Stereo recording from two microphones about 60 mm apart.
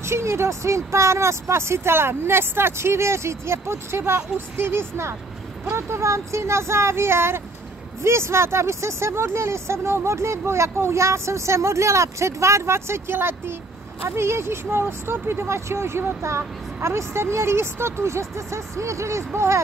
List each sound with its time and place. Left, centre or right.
0.0 s speech: right